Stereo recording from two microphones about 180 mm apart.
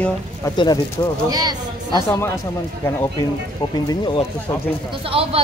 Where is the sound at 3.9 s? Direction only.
25° left (ahead or behind).